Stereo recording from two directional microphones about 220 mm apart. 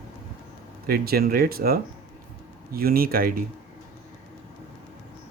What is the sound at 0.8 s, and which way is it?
Speech, 45° right (ahead or behind).